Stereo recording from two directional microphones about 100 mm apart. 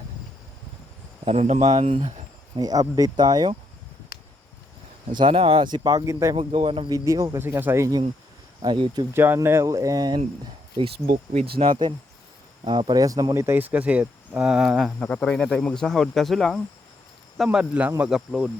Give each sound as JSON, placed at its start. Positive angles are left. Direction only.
{"t": 1.2, "sound": "speech", "side_deg": -90}
{"t": 2.6, "sound": "speech", "side_deg": -40}
{"t": 5.1, "sound": "speech", "side_deg": -60}
{"t": 6.3, "sound": "speech", "side_deg": -65}
{"t": 6.9, "sound": "speech", "side_deg": -35}
{"t": 7.4, "sound": "speech", "side_deg": -20}
{"t": 8.6, "sound": "speech", "side_deg": -55}
{"t": 9.1, "sound": "speech", "side_deg": -20}
{"t": 11.6, "sound": "speech", "side_deg": -60}
{"t": 13.6, "sound": "speech", "side_deg": -15}
{"t": 14.9, "sound": "speech", "side_deg": 10}